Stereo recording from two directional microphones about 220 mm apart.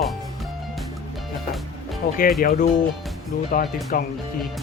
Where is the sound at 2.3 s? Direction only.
40° left (ahead or behind).